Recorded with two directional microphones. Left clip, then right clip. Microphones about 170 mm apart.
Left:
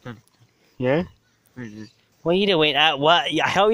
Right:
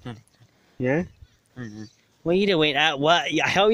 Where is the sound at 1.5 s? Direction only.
40° right (ahead or behind).